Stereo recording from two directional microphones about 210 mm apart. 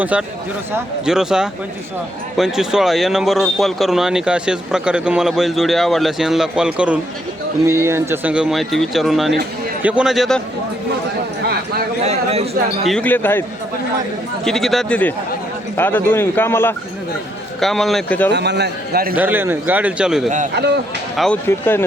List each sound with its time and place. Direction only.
0.0 s a man's voice: 5° right (ahead or behind)
12.0 s speech: 30° right (ahead or behind)
12.9 s speech: 5° left (ahead or behind)
14.4 s speech: centre (ahead or behind)
18.3 s a man's voice: 55° right (ahead or behind)
19.1 s a man's voice: 10° right (ahead or behind)
20.5 s speech: 50° right (ahead or behind)
21.2 s speech: 5° left (ahead or behind)